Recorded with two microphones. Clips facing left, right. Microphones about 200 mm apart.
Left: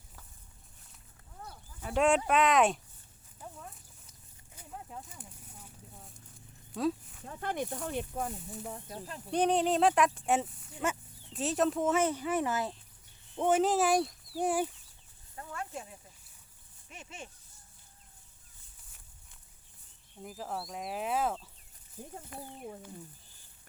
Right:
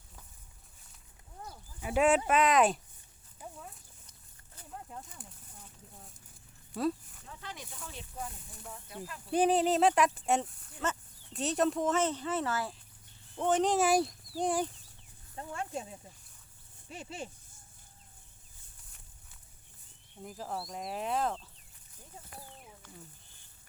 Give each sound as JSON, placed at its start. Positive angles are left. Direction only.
{"t": 1.8, "sound": "speech", "side_deg": -10}
{"t": 4.5, "sound": "a sound", "side_deg": 5}
{"t": 7.3, "sound": "speech", "side_deg": 50}
{"t": 8.6, "sound": "speech", "side_deg": 35}
{"t": 9.3, "sound": "speech", "side_deg": -5}
{"t": 15.4, "sound": "speech", "side_deg": -30}
{"t": 20.2, "sound": "speech", "side_deg": 0}